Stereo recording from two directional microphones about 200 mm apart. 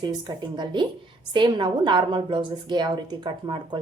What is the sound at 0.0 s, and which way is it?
A woman's voice, 20° right (ahead or behind).